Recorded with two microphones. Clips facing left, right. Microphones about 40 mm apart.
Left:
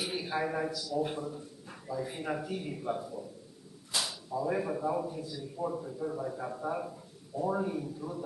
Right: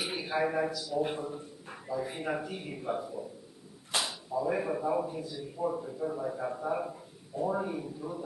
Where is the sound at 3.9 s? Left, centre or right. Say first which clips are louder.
Right 2 dB; right.